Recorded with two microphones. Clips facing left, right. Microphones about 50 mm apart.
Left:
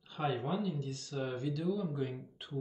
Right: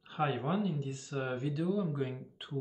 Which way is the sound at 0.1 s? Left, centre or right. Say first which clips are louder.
Right 2 dB; right.